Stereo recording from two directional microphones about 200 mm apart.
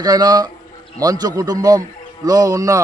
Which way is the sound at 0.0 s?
20° right (ahead or behind).